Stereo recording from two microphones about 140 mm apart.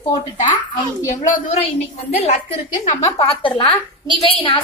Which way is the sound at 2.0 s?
50° left (ahead or behind).